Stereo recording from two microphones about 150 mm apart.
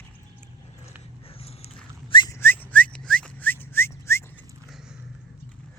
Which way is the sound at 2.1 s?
30° left (ahead or behind).